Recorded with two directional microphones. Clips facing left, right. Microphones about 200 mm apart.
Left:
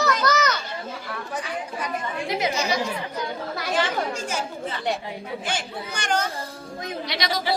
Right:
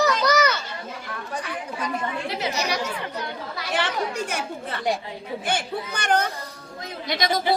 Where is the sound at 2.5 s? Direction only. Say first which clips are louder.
Left 2 dB; 70° right (ahead or behind).